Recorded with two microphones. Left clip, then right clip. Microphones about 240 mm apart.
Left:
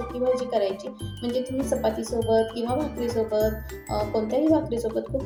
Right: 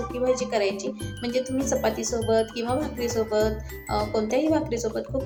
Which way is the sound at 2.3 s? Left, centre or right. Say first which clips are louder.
Left 1 dB; right.